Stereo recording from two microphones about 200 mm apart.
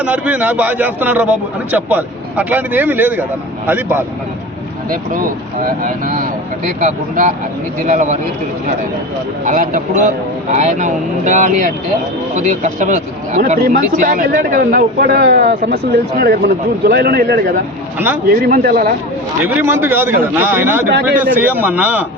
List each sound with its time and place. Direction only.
0.0 s a man's voice: 10° right (ahead or behind)
4.9 s a man's voice: 45° right (ahead or behind)
9.4 s a man's voice: 40° right (ahead or behind)
19.4 s a man's voice: 10° right (ahead or behind)